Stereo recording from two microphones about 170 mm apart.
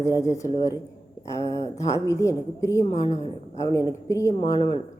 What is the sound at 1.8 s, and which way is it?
A woman's voice, 20° left (ahead or behind).